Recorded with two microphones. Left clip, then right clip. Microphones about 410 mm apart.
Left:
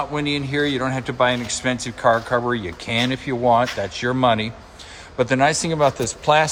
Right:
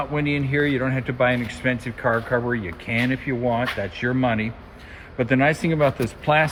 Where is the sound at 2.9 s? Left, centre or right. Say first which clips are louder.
Left 2 dB; left.